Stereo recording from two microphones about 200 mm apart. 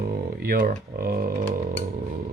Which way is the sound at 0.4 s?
45° right (ahead or behind).